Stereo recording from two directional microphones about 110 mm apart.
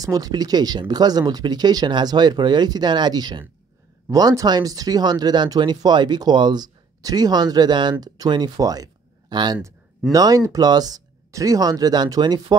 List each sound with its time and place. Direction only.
0.0 s speech: 35° right (ahead or behind)